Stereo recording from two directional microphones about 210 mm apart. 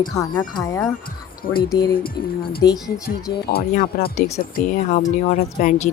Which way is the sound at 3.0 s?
45° left (ahead or behind).